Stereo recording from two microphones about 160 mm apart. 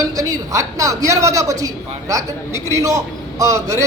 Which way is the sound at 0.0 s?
20° right (ahead or behind).